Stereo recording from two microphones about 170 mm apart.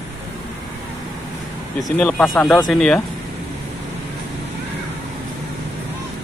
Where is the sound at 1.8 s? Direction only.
5° left (ahead or behind).